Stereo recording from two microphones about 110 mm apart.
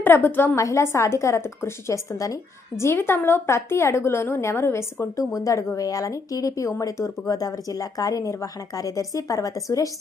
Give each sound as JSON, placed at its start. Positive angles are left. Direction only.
{"t": 0.0, "sound": "a woman's voice", "side_deg": 15}
{"t": 0.5, "sound": "a woman's voice", "side_deg": 30}